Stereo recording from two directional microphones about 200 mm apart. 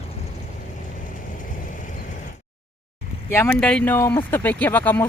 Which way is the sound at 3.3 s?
10° left (ahead or behind).